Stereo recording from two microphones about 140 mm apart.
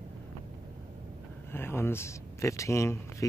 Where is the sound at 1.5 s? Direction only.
15° left (ahead or behind).